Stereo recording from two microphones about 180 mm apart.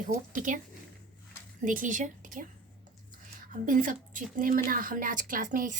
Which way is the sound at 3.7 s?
50° right (ahead or behind).